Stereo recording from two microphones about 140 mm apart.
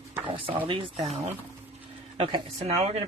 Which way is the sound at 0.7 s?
40° right (ahead or behind).